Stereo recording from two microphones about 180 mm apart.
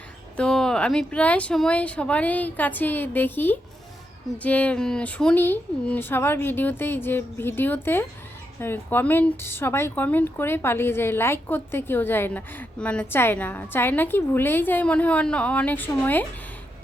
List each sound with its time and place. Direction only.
0.3 s speech: 5° left (ahead or behind)